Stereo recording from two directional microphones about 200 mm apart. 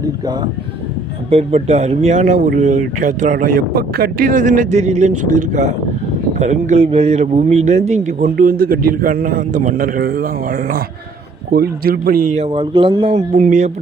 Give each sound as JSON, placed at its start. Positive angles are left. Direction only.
{"t": 1.3, "sound": "a man's voice", "side_deg": -30}
{"t": 12.4, "sound": "speech", "side_deg": -30}
{"t": 13.1, "sound": "speech", "side_deg": -40}